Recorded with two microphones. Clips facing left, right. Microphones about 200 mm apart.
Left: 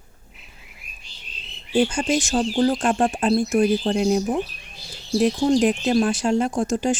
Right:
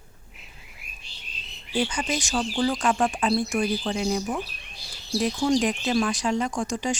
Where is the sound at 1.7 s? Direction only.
45° left (ahead or behind).